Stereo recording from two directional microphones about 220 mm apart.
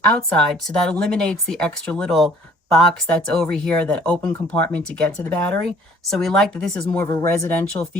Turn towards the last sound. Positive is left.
turn(degrees=5)  # may be behind; listen again after turning